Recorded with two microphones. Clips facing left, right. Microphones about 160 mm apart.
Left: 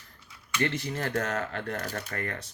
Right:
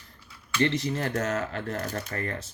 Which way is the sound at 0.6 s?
25° right (ahead or behind).